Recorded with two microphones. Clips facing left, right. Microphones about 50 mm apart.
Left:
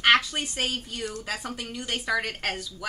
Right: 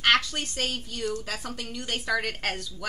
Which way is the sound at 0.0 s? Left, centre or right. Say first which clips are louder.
Left 2 dB; centre.